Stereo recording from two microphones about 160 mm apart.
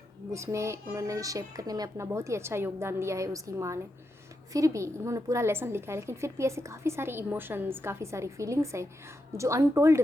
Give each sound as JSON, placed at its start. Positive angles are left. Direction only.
{"t": 0.3, "sound": "a woman's voice", "side_deg": -20}